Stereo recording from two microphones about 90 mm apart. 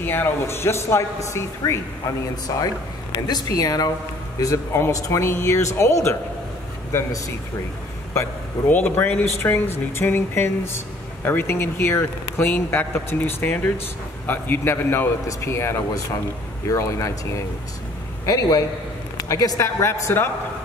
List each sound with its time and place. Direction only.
0.0 s speech: 25° left (ahead or behind)
2.5 s a man's voice: 40° left (ahead or behind)